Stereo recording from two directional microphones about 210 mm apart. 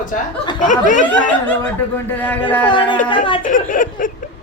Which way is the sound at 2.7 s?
20° left (ahead or behind).